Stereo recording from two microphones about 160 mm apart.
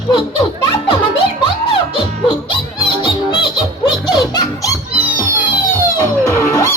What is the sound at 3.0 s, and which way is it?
Music, 30° left (ahead or behind).